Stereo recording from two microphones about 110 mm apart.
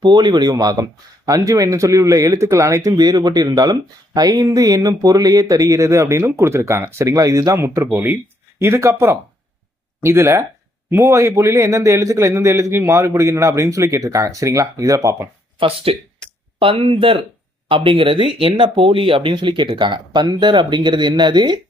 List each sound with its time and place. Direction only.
0.0 s a man's voice: 40° right (ahead or behind)
15.5 s speech: 55° right (ahead or behind)